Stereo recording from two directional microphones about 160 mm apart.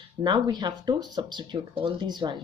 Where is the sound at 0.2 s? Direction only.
25° right (ahead or behind).